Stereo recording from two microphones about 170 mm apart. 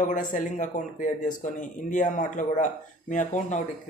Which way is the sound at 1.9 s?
50° left (ahead or behind).